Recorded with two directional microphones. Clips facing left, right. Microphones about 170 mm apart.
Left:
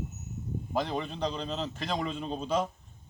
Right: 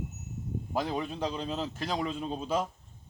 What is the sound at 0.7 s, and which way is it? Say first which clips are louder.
A man's voice: even; 5° right (ahead or behind).